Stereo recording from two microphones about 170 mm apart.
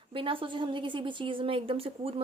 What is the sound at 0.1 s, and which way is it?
Speech, 30° right (ahead or behind).